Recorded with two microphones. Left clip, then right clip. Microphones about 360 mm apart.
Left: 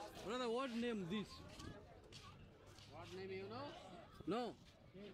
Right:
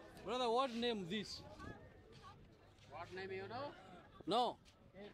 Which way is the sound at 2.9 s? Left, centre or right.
Right.